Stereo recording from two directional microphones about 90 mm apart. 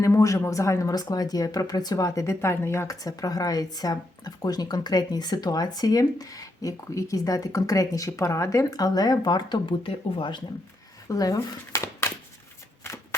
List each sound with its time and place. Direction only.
0.0 s speech: 35° left (ahead or behind); by 10.4 s 65° left (ahead or behind)
11.1 s speech: 40° left (ahead or behind)
12.8 s shuffling cards: 30° left (ahead or behind)